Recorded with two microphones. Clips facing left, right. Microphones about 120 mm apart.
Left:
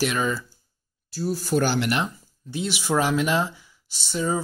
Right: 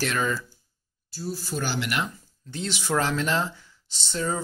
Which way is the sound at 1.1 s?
70° left (ahead or behind).